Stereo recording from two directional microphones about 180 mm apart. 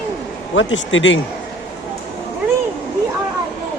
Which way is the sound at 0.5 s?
90° left.